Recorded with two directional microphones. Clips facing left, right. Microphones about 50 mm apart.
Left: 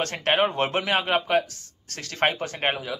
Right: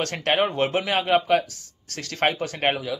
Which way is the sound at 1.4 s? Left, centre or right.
Left.